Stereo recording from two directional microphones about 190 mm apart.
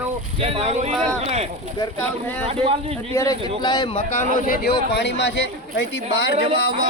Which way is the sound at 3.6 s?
20° left (ahead or behind).